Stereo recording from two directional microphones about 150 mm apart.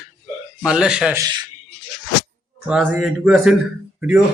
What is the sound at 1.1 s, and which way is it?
Speech, 25° right (ahead or behind).